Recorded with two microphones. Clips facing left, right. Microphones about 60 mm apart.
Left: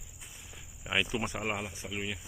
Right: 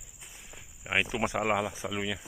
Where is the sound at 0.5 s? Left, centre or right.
Right.